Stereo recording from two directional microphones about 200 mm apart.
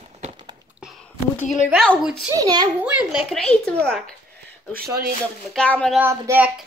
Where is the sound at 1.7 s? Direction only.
Centre (ahead or behind).